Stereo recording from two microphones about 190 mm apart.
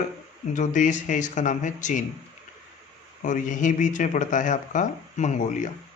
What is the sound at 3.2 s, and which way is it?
Speech, 40° left (ahead or behind).